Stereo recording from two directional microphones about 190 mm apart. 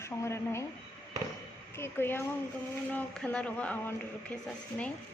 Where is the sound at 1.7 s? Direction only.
10° left (ahead or behind).